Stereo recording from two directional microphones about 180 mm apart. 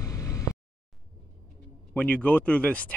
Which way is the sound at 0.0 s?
15° left (ahead or behind).